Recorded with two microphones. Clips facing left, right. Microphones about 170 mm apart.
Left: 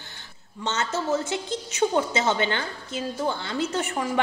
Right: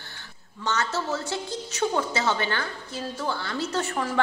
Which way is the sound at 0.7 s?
20° left (ahead or behind).